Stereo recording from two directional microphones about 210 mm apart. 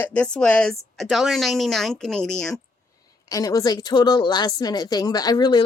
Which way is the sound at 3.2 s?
15° left (ahead or behind).